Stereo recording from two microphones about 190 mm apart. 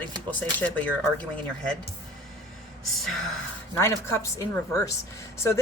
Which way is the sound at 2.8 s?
Centre (ahead or behind).